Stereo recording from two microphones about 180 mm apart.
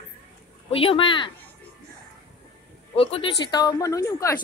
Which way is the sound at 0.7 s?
30° left (ahead or behind).